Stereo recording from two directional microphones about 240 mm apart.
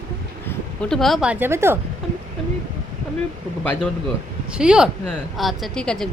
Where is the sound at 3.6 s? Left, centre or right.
Centre.